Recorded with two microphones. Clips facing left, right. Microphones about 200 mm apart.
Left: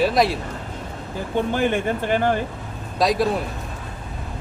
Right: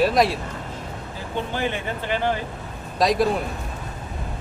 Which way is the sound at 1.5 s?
50° left (ahead or behind).